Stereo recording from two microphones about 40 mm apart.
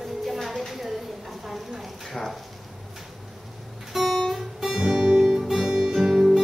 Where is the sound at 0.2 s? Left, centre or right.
Centre.